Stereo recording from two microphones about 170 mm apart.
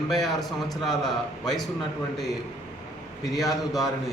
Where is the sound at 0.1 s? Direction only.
Centre (ahead or behind).